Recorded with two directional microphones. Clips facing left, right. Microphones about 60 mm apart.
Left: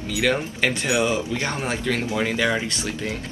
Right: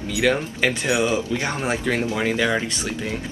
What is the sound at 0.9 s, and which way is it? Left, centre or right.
Speech, centre.